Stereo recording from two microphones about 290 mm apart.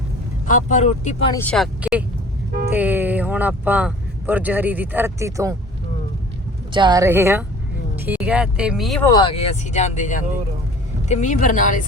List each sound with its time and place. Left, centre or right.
0.4 s speech: left
1.3 s speech: centre
6.7 s speech: centre; by 11.8 s left